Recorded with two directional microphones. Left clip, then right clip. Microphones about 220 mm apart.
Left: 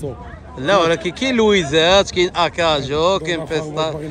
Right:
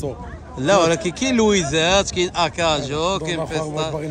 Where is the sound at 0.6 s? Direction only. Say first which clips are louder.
Left 1 dB; 20° right (ahead or behind).